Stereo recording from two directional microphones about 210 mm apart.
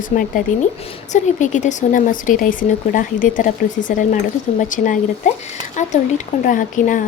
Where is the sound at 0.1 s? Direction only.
40° left (ahead or behind).